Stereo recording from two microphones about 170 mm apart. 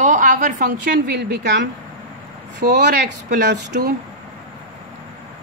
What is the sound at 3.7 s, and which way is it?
Speech, 60° right (ahead or behind).